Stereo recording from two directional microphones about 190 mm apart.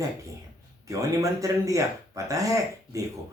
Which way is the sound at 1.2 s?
15° right (ahead or behind).